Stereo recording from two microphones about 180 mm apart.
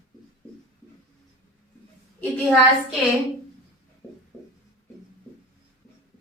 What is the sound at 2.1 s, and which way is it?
Speech, 10° left (ahead or behind).